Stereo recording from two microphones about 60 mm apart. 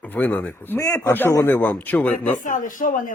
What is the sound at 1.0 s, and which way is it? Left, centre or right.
Speech, left.